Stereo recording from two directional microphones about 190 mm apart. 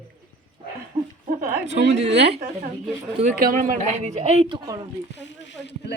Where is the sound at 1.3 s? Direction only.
45° right (ahead or behind).